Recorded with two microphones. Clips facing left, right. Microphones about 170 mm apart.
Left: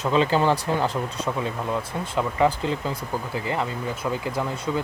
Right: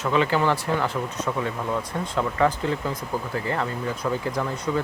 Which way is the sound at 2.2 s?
15° left (ahead or behind).